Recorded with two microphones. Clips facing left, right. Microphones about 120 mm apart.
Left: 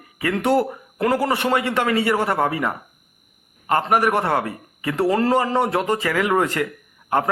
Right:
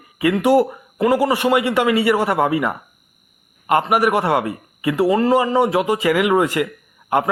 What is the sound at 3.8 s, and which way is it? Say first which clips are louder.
A man's voice: right 2 dB; 5° right (ahead or behind).